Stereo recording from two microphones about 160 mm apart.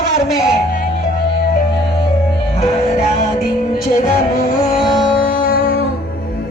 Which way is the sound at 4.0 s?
60° left (ahead or behind).